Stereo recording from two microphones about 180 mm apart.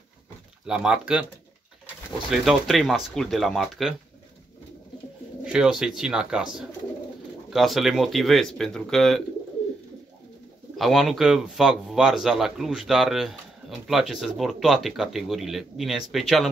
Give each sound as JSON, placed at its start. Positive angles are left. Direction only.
{"t": 0.7, "sound": "speech", "side_deg": -5}
{"t": 2.3, "sound": "speech", "side_deg": 0}
{"t": 5.4, "sound": "speech", "side_deg": -5}
{"t": 10.8, "sound": "speech", "side_deg": 0}